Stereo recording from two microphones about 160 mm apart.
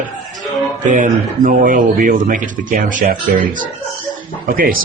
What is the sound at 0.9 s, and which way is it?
Speech, 50° right (ahead or behind).